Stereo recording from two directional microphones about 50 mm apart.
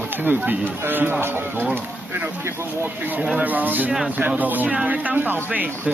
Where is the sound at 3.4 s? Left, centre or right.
Right.